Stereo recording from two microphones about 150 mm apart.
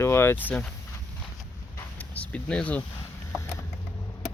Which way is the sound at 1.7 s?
10° left (ahead or behind).